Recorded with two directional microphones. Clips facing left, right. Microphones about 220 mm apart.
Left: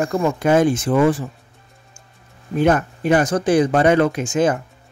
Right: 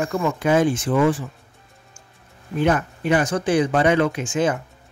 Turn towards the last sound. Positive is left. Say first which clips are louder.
# left 3 dB
turn(degrees=40)  # may be behind; listen again after turning